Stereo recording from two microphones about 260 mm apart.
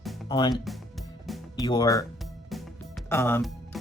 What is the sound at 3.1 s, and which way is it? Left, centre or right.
Speech, centre.